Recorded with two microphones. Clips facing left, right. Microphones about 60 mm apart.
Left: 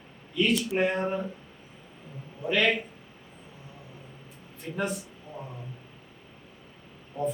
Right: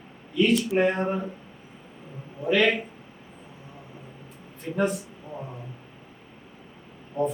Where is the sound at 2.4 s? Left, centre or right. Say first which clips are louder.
Right 3 dB; centre.